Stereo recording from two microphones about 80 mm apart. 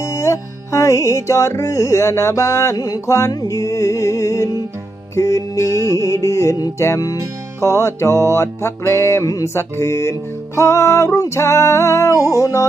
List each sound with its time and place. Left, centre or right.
0.0 s music: left
2.7 s music: left
5.6 s music: right
5.9 s music: left